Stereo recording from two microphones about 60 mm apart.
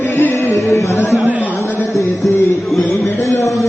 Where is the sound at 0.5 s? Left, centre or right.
Left.